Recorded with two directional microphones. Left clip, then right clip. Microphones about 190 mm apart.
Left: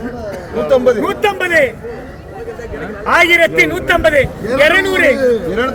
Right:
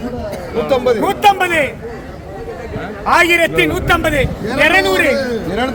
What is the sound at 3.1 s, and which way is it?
A man's voice, 20° right (ahead or behind).